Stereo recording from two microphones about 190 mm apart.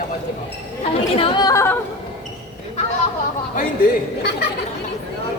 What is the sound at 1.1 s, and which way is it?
Speech, 25° left (ahead or behind).